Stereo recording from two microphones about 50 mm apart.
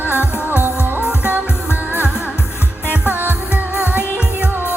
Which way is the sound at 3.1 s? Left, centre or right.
Right.